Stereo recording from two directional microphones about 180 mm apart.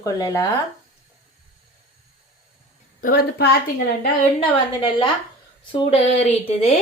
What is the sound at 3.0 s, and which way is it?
Speech, 55° left (ahead or behind).